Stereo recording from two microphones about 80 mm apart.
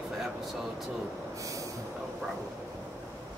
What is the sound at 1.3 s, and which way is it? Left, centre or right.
Train, right.